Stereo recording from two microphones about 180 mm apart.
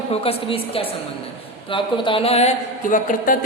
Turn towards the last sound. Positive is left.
turn(degrees=45)  # may be behind; listen again after turning